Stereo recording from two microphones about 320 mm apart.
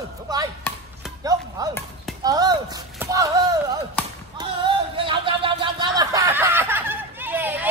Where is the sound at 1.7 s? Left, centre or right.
Centre.